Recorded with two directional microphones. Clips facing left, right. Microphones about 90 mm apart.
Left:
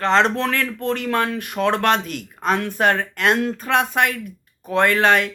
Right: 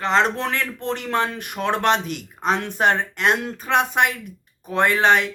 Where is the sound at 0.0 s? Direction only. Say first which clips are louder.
Left 2 dB; 5° right (ahead or behind).